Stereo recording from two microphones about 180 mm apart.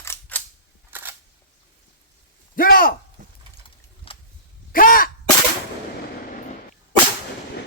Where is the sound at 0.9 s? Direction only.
10° right (ahead or behind).